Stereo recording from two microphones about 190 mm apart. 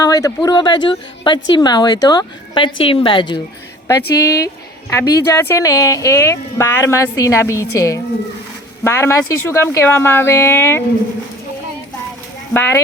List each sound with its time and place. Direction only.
0.0 s a woman's voice: 20° left (ahead or behind)
12.5 s speech: 10° left (ahead or behind)